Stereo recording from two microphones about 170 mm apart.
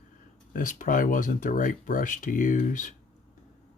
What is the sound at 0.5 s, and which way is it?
Speech, 50° left (ahead or behind).